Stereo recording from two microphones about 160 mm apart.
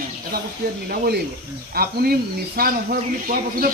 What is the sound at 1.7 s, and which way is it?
Speech, 70° right (ahead or behind).